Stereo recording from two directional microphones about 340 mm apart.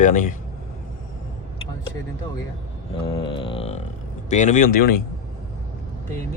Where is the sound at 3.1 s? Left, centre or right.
Centre.